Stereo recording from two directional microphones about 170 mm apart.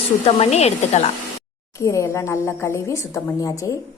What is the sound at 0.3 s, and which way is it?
Speech, 40° left (ahead or behind).